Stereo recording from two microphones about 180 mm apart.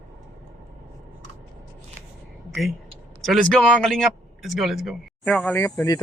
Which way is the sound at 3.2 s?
Centre (ahead or behind).